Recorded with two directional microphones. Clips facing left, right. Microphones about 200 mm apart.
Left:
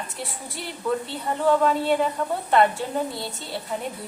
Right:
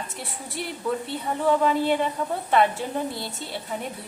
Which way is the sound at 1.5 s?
5° right (ahead or behind).